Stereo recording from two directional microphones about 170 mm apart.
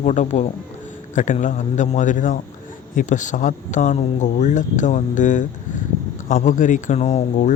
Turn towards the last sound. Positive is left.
turn(degrees=45)  # may be behind; listen again after turning